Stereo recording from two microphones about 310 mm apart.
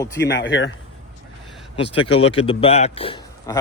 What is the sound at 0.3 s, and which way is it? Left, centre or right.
Speech, left.